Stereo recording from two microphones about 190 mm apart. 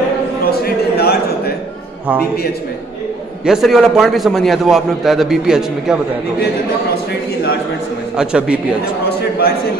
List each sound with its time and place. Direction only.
0.5 s a sound: 55° left (ahead or behind)
3.4 s a man's voice: centre (ahead or behind)
8.2 s a man's voice: 5° right (ahead or behind)